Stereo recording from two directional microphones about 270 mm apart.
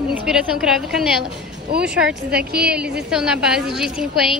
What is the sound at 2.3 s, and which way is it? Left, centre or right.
Speech, right.